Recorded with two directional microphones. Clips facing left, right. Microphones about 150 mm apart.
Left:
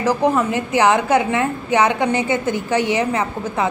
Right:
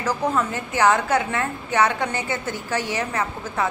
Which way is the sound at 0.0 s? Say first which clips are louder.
Left 6 dB; 20° left (ahead or behind).